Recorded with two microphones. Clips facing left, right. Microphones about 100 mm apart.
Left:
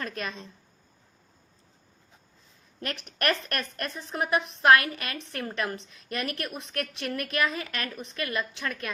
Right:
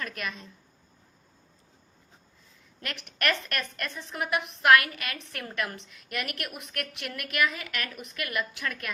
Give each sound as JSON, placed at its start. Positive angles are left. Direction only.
{"t": 0.0, "sound": "a woman's voice", "side_deg": 30}
{"t": 2.8, "sound": "a woman's voice", "side_deg": 35}